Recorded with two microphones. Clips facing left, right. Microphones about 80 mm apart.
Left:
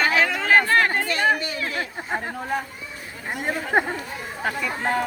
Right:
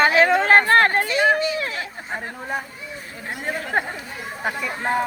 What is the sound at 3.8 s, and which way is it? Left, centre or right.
Speech, centre.